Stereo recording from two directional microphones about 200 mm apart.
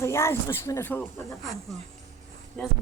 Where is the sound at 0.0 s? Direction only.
15° left (ahead or behind).